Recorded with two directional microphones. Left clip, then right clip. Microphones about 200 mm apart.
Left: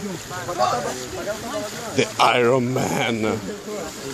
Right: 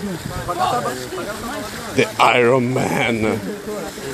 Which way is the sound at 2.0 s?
Centre (ahead or behind).